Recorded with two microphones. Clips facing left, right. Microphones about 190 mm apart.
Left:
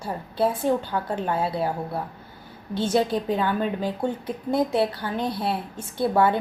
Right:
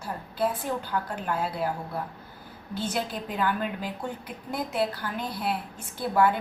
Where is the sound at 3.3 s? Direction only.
25° left (ahead or behind).